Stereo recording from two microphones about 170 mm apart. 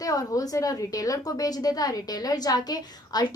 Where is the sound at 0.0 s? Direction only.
20° left (ahead or behind).